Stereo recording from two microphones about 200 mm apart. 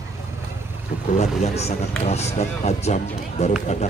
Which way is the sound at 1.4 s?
35° left (ahead or behind).